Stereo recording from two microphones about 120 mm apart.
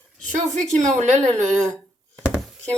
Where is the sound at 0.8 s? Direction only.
80° right.